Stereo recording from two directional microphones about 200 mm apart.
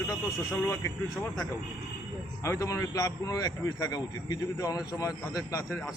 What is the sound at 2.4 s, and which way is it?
A man's voice, 15° left (ahead or behind).